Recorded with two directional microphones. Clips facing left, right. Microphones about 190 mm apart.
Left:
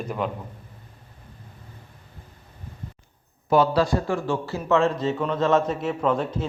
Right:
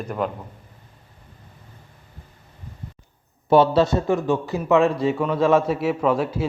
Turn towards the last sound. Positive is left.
turn(degrees=-5)  # may be behind; listen again after turning